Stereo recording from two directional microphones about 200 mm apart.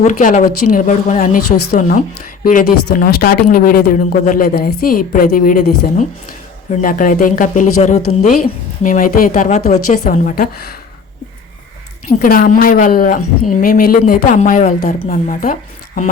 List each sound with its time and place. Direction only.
0.0 s a woman's voice: 40° left (ahead or behind)
12.2 s a woman's voice: 45° left (ahead or behind)